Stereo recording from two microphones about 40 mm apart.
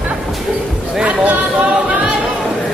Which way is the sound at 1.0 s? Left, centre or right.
Right.